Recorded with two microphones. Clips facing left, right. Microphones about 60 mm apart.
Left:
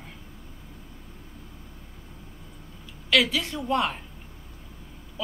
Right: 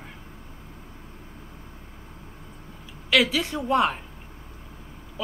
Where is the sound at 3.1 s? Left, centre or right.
Centre.